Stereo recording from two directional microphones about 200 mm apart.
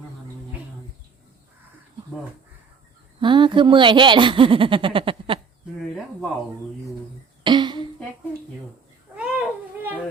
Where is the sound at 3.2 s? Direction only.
25° right (ahead or behind).